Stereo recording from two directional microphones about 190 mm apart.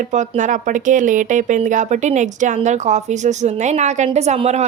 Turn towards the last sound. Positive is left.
turn(degrees=-35)  # may be behind; listen again after turning